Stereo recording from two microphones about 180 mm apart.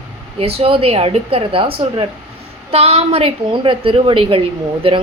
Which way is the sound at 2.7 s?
35° right (ahead or behind).